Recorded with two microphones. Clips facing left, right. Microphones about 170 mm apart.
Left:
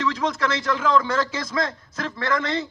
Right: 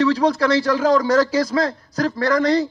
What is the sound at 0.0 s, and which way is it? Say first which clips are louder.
A man's voice: right 7 dB; 35° right (ahead or behind).